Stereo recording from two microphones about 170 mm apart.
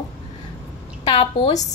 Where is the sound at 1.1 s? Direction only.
25° left (ahead or behind).